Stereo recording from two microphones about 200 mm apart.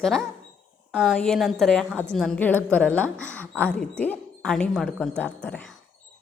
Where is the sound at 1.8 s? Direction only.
10° right (ahead or behind).